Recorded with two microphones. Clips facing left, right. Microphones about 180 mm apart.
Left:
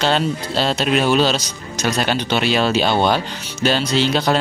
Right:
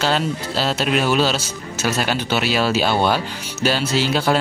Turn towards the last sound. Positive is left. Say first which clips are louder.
# left 1 dB
turn(degrees=-10)  # may be behind; listen again after turning